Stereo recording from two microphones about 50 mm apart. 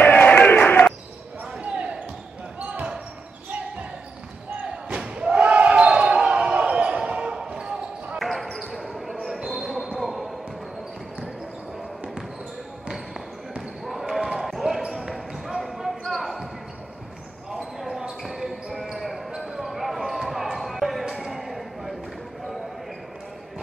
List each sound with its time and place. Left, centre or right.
0.0 s a sound: left
1.4 s basketball bounce: right
4.6 s basketball bounce: right
8.2 s basketball bounce: centre
13.6 s basketball bounce: centre
17.5 s basketball bounce: centre
21.2 s a sound: centre